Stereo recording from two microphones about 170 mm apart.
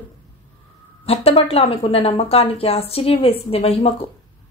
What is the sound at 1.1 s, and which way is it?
Speech, 35° left (ahead or behind).